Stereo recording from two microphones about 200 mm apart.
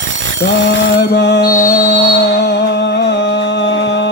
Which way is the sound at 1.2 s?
60° left (ahead or behind).